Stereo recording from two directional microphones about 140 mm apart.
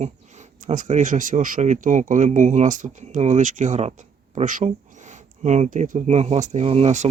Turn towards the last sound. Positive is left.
turn(degrees=-50)  # may be behind; listen again after turning